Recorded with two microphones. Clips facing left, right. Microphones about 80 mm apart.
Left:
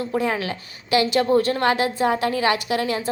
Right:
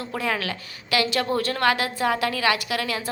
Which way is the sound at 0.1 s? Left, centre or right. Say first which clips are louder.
Left 1 dB; left.